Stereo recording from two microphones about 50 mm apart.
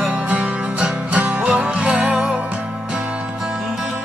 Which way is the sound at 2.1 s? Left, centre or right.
Centre.